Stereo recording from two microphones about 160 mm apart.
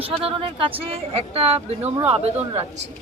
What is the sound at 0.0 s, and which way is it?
Speech, 35° right (ahead or behind).